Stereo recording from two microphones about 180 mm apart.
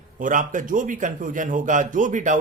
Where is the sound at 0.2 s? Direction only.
45° right (ahead or behind).